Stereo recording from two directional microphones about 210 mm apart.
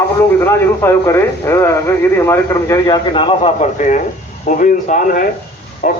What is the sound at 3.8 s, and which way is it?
A man's voice, 35° left (ahead or behind).